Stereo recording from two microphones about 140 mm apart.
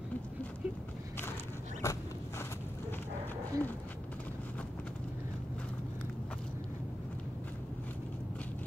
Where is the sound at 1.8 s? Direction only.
20° left (ahead or behind).